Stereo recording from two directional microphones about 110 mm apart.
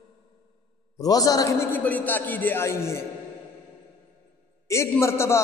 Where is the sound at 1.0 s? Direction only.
35° left (ahead or behind).